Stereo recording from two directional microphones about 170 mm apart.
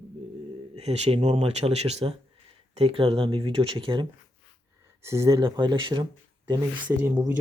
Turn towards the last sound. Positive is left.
turn(degrees=-10)  # may be behind; listen again after turning